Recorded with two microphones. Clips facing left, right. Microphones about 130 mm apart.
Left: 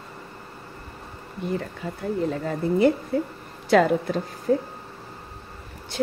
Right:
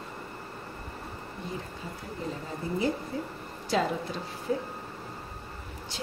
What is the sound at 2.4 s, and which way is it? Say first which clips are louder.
A woman's voice: left 10 dB; 70° left (ahead or behind).